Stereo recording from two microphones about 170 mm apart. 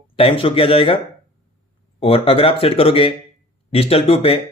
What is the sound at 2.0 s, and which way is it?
Speech, 35° left (ahead or behind).